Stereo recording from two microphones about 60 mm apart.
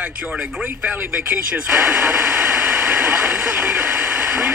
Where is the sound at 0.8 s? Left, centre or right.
Right.